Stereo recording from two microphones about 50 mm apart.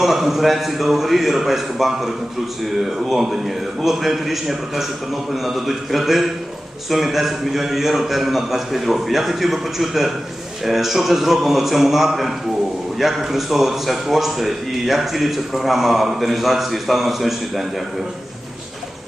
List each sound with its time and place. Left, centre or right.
0.0 s a man's voice: centre